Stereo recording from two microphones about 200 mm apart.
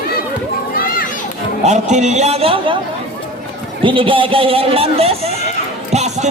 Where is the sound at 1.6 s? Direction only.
35° right (ahead or behind).